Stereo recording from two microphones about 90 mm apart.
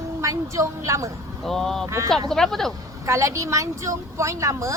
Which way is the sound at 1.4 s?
5° left (ahead or behind).